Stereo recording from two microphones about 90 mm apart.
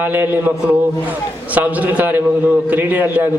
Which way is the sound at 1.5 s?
15° right (ahead or behind).